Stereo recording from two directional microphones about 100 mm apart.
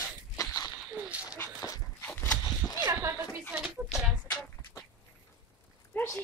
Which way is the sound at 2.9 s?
30° right (ahead or behind).